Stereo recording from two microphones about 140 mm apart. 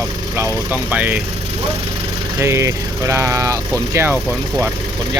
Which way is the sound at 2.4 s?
20° right (ahead or behind).